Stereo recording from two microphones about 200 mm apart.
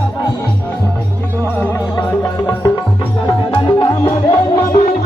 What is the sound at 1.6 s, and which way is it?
Music, 10° left (ahead or behind).